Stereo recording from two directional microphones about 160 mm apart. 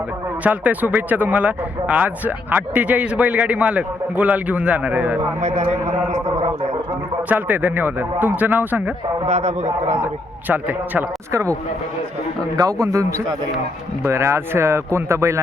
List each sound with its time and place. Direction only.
0.4 s speech: 10° right (ahead or behind)
5.4 s a man's voice: 45° right (ahead or behind)
7.3 s speech: 10° right (ahead or behind)
9.2 s a man's voice: 45° right (ahead or behind)
10.5 s speech: 10° right (ahead or behind)
12.5 s speech: 20° right (ahead or behind)